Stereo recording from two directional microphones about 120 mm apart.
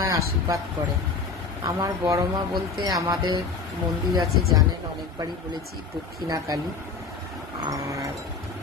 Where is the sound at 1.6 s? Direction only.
30° right (ahead or behind).